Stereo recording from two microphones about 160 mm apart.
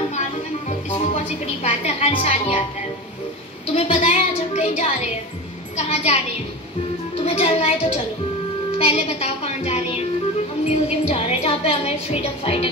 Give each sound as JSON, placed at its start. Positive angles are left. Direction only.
{"t": 0.7, "sound": "a woman's voice", "side_deg": 40}
{"t": 3.7, "sound": "a woman's voice", "side_deg": 40}
{"t": 7.2, "sound": "speech", "side_deg": 40}